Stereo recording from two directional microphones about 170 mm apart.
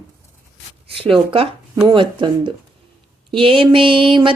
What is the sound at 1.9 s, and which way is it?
Speech, 30° right (ahead or behind).